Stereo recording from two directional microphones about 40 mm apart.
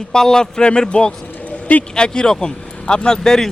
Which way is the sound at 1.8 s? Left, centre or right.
Left.